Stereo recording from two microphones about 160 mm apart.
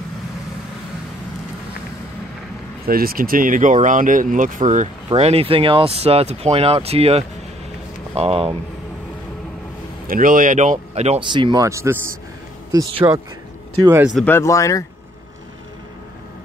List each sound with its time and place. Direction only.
2.9 s speech: 65° right (ahead or behind); by 8.5 s 40° right (ahead or behind)
10.0 s speech: 60° right (ahead or behind)
11.1 s speech: 30° right (ahead or behind)
13.0 s speech: 25° right (ahead or behind)
13.8 s speech: 15° right (ahead or behind)
14.2 s speech: 15° left (ahead or behind)